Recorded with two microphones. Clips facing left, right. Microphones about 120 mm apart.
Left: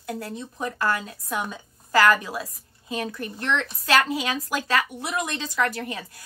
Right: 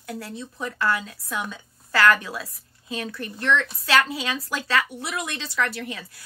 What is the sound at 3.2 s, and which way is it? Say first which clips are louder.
Speech: right 5 dB; 20° left (ahead or behind).